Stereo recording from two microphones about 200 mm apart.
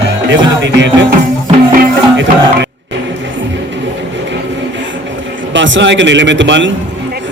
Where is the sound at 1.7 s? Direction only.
45° right (ahead or behind).